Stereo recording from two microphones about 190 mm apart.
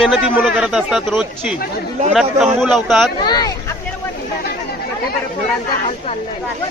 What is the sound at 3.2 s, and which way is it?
Speech, 20° left (ahead or behind).